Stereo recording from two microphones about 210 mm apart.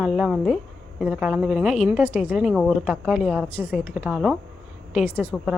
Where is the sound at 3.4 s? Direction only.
10° left (ahead or behind).